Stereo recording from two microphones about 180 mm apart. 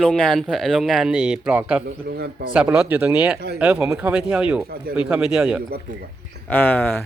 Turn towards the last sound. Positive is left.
turn(degrees=10)  # may be behind; listen again after turning